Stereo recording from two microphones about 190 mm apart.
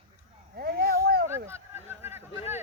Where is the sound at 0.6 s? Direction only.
55° right (ahead or behind).